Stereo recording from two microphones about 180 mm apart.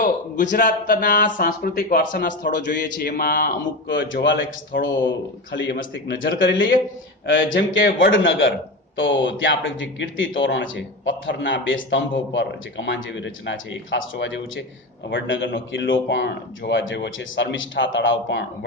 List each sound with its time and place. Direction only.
0.5 s speech: 50° left (ahead or behind)
2.7 s speech: 75° left (ahead or behind); by 3.5 s 50° left (ahead or behind)
3.8 s a man's voice: 90° left
7.3 s speech: 90° left